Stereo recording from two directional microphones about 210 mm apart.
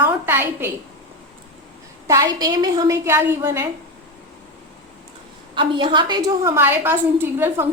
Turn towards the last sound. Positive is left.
turn(degrees=-10)  # may be behind; listen again after turning